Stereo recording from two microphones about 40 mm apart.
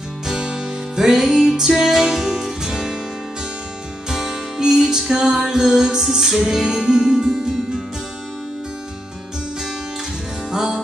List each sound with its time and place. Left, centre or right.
0.3 s music: centre
4.1 s music: centre
10.5 s music: centre